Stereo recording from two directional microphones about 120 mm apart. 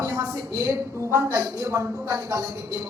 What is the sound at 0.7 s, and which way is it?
A woman's voice, 25° right (ahead or behind).